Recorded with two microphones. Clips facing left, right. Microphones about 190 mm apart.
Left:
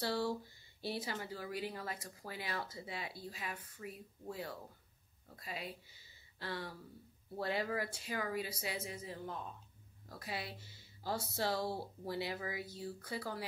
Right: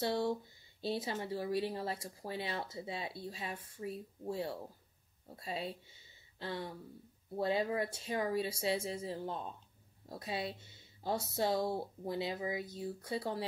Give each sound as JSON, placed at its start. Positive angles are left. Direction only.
{"t": 0.0, "sound": "speech", "side_deg": -20}